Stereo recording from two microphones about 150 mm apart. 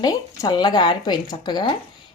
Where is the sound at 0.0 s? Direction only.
25° left (ahead or behind).